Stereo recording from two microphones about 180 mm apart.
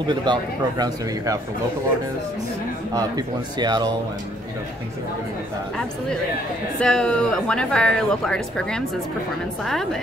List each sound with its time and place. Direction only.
0.0 s speech: 25° right (ahead or behind)
2.9 s speech: 20° right (ahead or behind)
6.8 s speech: 5° left (ahead or behind)